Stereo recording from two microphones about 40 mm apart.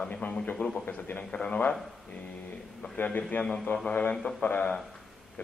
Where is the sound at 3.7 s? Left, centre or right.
Left.